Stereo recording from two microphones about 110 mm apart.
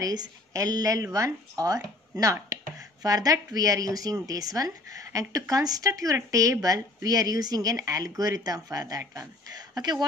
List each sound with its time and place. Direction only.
0.0 s speech: 35° right (ahead or behind)